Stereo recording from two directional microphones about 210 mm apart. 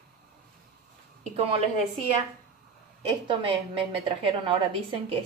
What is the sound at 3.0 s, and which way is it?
A woman's voice, 25° right (ahead or behind).